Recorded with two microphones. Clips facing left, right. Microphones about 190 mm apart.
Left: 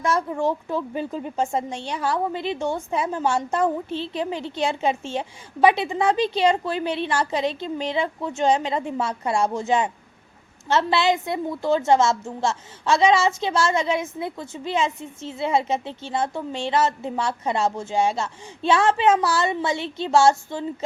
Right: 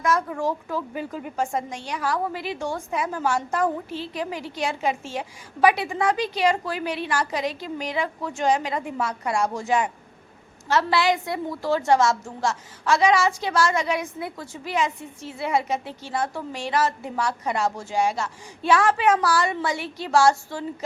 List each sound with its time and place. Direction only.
0.0 s a woman's voice: 30° left (ahead or behind)